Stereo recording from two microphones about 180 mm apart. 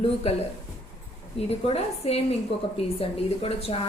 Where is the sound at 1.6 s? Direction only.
35° left (ahead or behind).